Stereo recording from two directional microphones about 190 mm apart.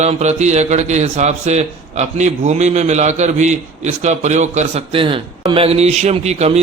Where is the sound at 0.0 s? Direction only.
35° right (ahead or behind).